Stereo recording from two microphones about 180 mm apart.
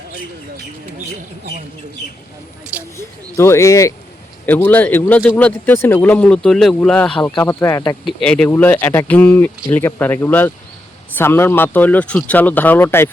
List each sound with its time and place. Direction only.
2.9 s speech: 15° left (ahead or behind)
7.4 s speech: 15° left (ahead or behind)
8.0 s speech: 5° left (ahead or behind)